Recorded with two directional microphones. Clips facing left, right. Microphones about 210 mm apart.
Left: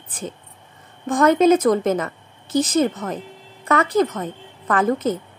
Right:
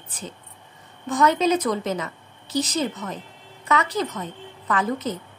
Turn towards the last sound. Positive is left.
turn(degrees=50)  # may be behind; listen again after turning